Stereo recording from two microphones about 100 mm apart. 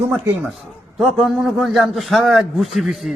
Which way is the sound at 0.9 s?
Centre (ahead or behind).